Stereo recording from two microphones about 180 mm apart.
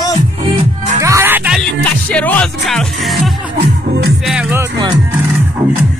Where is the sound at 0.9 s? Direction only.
15° right (ahead or behind).